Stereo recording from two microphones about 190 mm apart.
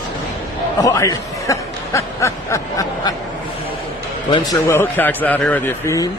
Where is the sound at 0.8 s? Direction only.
15° left (ahead or behind).